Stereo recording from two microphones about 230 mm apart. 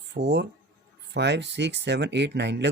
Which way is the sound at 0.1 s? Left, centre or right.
Right.